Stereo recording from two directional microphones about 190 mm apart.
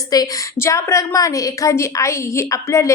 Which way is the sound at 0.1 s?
15° left (ahead or behind).